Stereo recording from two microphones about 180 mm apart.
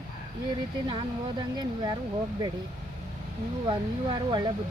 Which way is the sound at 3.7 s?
25° right (ahead or behind).